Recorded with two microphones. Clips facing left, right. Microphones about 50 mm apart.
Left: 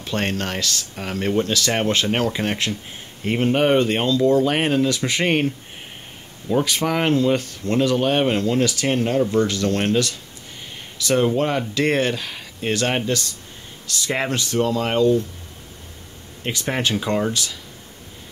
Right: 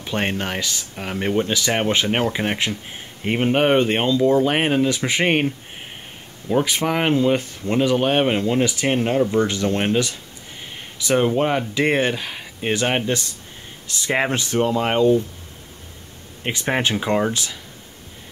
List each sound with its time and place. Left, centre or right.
0.0 s speech: centre
6.5 s speech: centre
16.4 s speech: right